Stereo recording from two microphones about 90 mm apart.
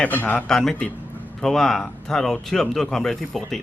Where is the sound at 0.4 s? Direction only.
5° left (ahead or behind).